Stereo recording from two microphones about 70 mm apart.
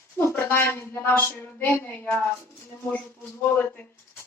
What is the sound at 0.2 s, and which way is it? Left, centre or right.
Speech, left.